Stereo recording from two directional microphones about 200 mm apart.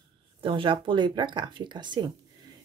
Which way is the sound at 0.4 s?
25° right (ahead or behind).